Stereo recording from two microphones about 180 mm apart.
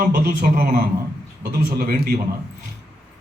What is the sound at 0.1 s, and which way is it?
A man's voice, 50° right (ahead or behind).